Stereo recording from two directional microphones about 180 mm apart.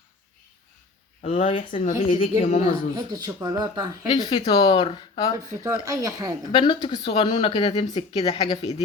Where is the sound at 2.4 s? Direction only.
35° left (ahead or behind).